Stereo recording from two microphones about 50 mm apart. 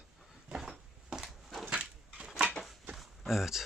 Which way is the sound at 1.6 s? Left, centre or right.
Right.